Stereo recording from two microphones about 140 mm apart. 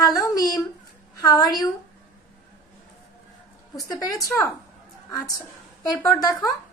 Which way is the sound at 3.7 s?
25° left (ahead or behind).